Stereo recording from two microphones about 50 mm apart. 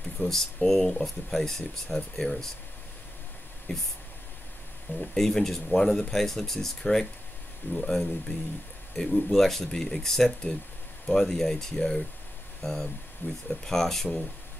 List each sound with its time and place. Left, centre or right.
0.2 s speech: centre
3.7 s speech: centre
5.1 s speech: centre
13.2 s speech: left
13.7 s speech: centre